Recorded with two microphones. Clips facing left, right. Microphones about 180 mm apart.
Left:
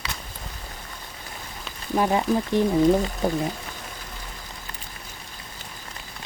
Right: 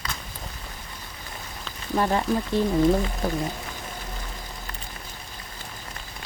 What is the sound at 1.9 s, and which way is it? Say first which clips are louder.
Speech: left 2 dB; 10° left (ahead or behind).